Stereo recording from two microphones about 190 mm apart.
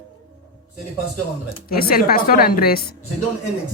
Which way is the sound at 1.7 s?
50° left (ahead or behind).